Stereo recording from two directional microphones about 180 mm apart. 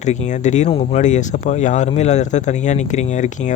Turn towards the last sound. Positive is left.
turn(degrees=45)  # may be behind; listen again after turning